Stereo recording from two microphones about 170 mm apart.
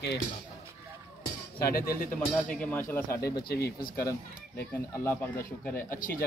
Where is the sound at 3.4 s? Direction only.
65° left (ahead or behind).